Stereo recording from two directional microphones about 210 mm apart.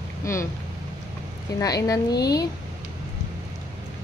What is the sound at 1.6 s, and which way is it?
Speech, 15° left (ahead or behind).